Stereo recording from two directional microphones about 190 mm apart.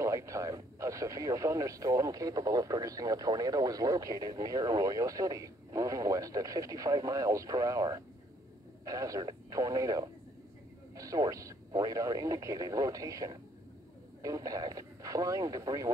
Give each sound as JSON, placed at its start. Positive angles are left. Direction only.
{"t": 0.0, "sound": "speech", "side_deg": -15}